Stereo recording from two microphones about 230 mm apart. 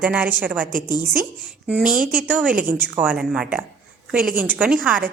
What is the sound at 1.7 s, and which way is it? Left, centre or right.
A woman's voice, centre.